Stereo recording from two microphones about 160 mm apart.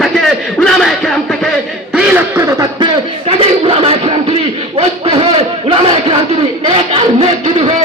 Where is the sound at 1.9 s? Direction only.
15° right (ahead or behind).